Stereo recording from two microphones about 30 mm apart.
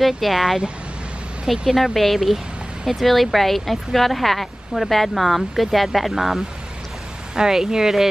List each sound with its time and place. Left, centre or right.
0.0 s speech: centre
1.8 s speech: centre